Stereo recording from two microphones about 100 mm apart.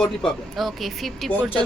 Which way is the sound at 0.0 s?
Centre (ahead or behind).